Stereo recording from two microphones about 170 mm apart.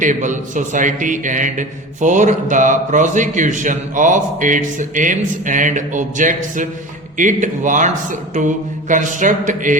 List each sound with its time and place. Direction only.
0.0 s a man's voice: 50° right (ahead or behind)